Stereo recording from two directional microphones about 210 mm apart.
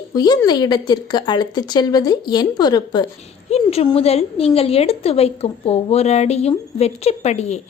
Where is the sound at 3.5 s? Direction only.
30° left (ahead or behind).